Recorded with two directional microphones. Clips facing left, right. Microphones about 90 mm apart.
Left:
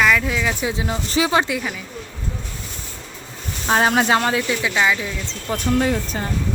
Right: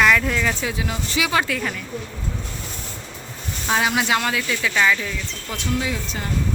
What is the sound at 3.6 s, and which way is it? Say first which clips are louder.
Speech: left 4 dB; 40° left (ahead or behind).